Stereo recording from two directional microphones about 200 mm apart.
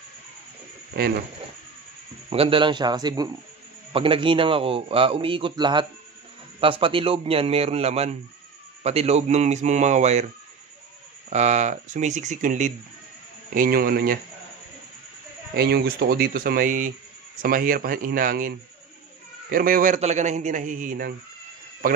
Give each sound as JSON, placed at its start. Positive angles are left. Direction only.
{"t": 2.2, "sound": "a man's voice", "side_deg": -30}
{"t": 11.2, "sound": "speech", "side_deg": -35}
{"t": 15.5, "sound": "speech", "side_deg": -50}
{"t": 19.5, "sound": "speech", "side_deg": -45}